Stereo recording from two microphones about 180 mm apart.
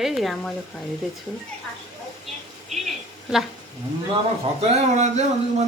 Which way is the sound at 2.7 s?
Centre (ahead or behind).